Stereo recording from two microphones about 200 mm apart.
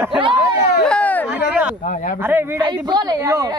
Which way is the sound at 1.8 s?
40° left (ahead or behind).